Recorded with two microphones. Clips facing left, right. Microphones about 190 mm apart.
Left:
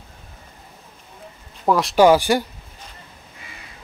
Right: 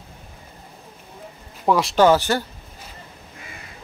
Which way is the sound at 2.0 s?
10° left (ahead or behind).